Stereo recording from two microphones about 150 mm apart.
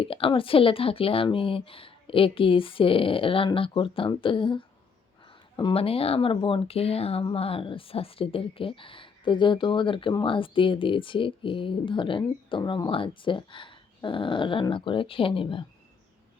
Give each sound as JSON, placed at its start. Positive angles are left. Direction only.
{"t": 0.0, "sound": "speech", "side_deg": 35}